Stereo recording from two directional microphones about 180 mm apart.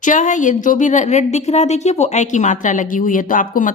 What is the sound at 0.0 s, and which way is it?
A woman's voice, 45° left (ahead or behind).